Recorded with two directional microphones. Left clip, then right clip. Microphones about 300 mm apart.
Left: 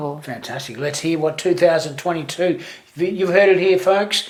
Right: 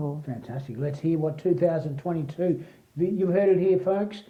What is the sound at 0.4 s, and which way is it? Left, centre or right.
A woman's voice, centre.